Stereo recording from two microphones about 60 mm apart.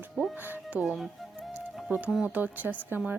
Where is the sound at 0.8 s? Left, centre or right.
Centre.